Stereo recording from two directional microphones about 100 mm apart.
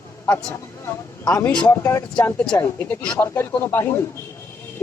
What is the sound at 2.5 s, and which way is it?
A man's voice, 20° left (ahead or behind).